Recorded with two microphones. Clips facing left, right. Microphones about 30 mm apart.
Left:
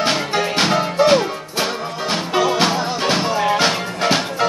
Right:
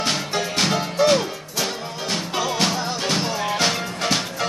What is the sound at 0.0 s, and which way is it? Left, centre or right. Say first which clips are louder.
Music: left 5 dB; centre.